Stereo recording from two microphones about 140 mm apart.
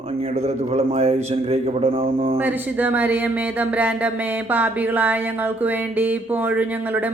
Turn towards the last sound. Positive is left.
turn(degrees=-10)  # may be behind; listen again after turning